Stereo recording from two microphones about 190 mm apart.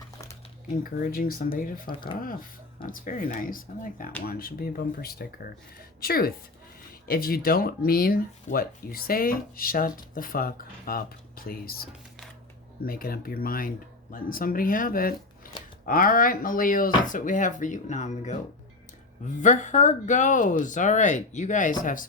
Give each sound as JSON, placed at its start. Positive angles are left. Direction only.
{"t": 0.9, "sound": "speech", "side_deg": 50}
{"t": 15.4, "sound": "a sound", "side_deg": 45}
{"t": 15.9, "sound": "speech", "side_deg": 50}
{"t": 19.4, "sound": "speech", "side_deg": 40}